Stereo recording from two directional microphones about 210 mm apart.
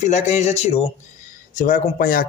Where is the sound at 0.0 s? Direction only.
35° left (ahead or behind).